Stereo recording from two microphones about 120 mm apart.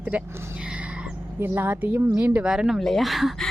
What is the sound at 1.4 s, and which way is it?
A woman's voice, 15° right (ahead or behind).